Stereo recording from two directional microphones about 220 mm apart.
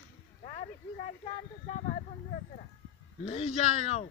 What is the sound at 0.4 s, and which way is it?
Speech, 35° left (ahead or behind).